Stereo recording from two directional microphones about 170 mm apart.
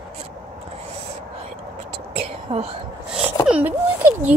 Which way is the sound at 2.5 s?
35° right (ahead or behind).